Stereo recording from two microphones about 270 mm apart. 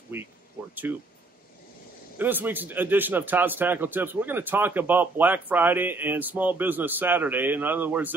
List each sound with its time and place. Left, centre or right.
2.1 s a man's voice: centre